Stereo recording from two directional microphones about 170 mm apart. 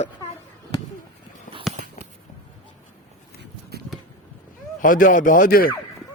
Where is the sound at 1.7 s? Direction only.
40° right (ahead or behind).